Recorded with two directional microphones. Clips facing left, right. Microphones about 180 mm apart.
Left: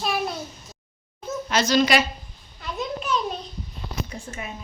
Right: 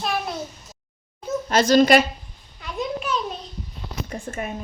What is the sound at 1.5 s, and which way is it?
Speech, 50° right (ahead or behind).